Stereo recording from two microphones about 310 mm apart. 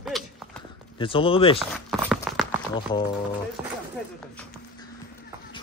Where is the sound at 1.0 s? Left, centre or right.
Centre.